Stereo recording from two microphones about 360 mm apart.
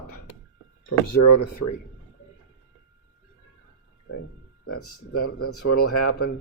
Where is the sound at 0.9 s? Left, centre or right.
Left.